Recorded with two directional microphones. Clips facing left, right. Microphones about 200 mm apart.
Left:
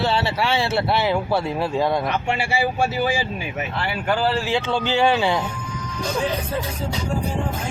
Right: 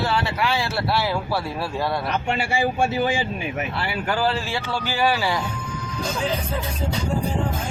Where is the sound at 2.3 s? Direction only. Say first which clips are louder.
Left 1 dB; 10° left (ahead or behind).